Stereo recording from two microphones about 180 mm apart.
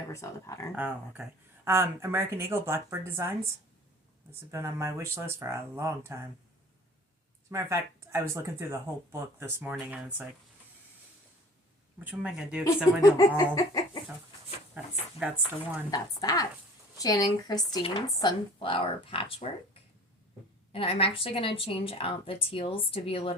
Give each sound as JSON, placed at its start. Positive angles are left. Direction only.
{"t": 0.1, "sound": "speech", "side_deg": 15}
{"t": 0.8, "sound": "speech", "side_deg": -10}
{"t": 7.5, "sound": "speech", "side_deg": -15}
{"t": 11.9, "sound": "speech", "side_deg": -5}
{"t": 13.0, "sound": "speech", "side_deg": 20}
{"t": 15.2, "sound": "speech", "side_deg": -5}
{"t": 15.9, "sound": "speech", "side_deg": 20}
{"t": 20.7, "sound": "a woman's voice", "side_deg": 30}